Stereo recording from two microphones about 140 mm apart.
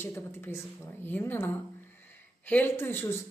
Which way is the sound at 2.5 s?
15° left (ahead or behind).